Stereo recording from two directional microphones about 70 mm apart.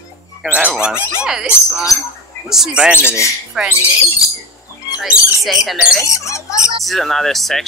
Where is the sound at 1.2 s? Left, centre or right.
Centre.